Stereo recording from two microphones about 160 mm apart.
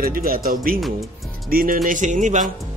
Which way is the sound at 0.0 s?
65° right (ahead or behind).